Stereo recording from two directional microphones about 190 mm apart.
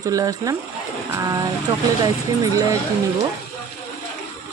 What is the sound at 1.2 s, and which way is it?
Vehicle, 20° right (ahead or behind).